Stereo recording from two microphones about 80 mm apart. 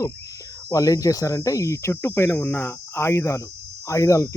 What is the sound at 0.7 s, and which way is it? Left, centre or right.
Speech, left.